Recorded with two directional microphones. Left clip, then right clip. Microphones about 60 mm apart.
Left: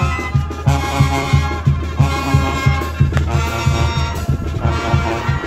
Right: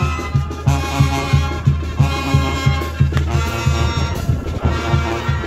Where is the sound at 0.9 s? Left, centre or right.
Centre.